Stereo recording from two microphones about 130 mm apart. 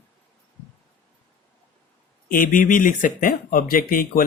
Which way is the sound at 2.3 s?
90° left.